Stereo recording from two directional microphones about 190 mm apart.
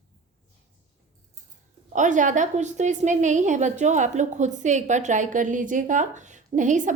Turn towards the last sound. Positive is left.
turn(degrees=-40)  # may be behind; listen again after turning